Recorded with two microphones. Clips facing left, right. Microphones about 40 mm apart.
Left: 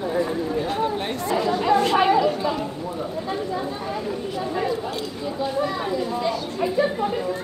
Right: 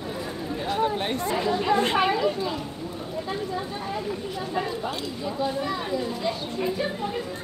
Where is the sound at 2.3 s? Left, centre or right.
Centre.